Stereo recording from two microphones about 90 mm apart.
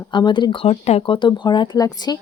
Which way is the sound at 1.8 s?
45° left (ahead or behind).